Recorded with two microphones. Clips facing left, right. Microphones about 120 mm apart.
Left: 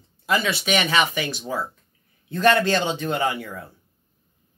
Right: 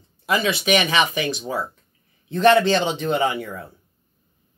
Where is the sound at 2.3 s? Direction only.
25° right (ahead or behind).